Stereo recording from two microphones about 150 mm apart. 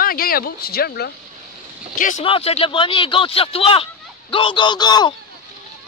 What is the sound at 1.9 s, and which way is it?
Speech, 60° left (ahead or behind).